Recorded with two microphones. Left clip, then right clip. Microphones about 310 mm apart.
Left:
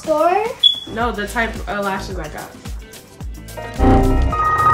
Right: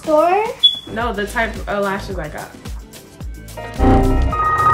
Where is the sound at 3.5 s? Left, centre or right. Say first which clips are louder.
Even; centre.